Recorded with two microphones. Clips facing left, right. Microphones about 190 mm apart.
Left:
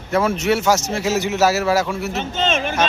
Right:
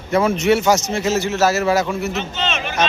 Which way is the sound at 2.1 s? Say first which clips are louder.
Left 3 dB; 50° left (ahead or behind).